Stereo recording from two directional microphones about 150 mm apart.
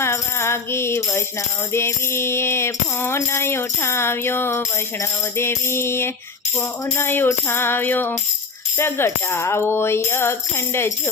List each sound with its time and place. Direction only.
0.0 s music: 15° left (ahead or behind)